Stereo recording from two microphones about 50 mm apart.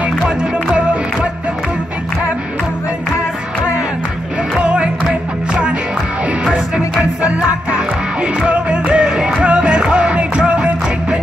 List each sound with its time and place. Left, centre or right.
4.6 s music: right
7.0 s music: right